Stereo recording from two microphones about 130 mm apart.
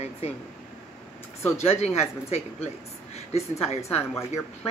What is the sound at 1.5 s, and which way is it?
A woman's voice, 55° left (ahead or behind).